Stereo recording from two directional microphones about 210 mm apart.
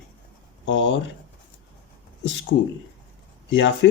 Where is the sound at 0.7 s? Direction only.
60° left (ahead or behind).